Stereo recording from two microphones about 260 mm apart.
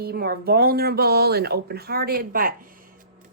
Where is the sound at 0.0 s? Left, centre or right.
Right.